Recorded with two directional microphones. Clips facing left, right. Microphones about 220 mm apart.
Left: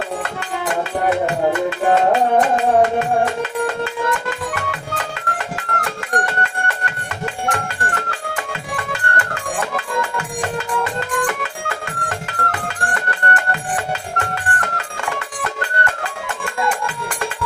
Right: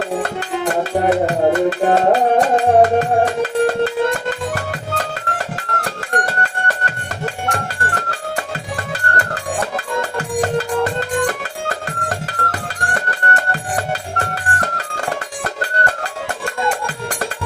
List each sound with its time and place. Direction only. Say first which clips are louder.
0.2 s music: right 4 dB; 35° right (ahead or behind)
16.8 s music: right 1 dB; 40° right (ahead or behind)